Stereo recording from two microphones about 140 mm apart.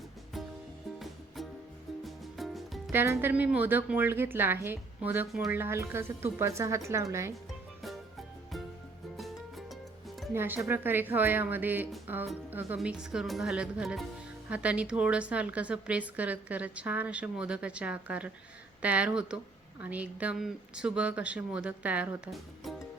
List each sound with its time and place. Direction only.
2.0 s music: centre (ahead or behind)
2.9 s a woman's voice: 15° right (ahead or behind)
9.1 s music: centre (ahead or behind)
10.3 s a woman's voice: 15° right (ahead or behind)